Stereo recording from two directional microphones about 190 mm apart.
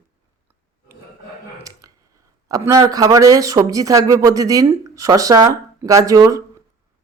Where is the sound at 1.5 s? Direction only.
15° right (ahead or behind).